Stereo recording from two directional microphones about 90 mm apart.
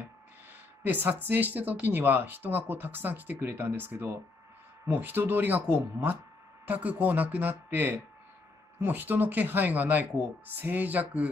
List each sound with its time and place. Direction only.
0.8 s speech: 20° right (ahead or behind)